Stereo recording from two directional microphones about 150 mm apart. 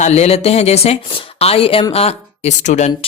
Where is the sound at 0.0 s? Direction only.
50° left (ahead or behind).